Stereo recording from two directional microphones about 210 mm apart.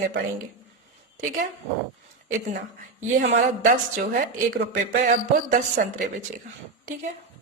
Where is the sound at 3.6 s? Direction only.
40° right (ahead or behind).